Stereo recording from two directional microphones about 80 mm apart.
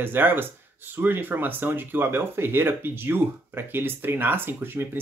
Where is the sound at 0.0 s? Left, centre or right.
Right.